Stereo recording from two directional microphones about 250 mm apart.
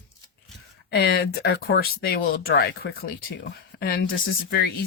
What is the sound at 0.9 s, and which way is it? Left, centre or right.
Speech, left.